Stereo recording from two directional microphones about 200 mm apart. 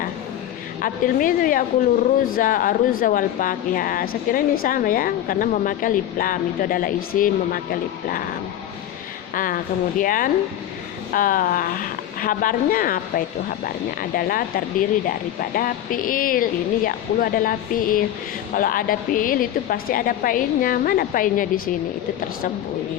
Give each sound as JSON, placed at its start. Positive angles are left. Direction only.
{"t": 0.8, "sound": "a woman's voice", "side_deg": 45}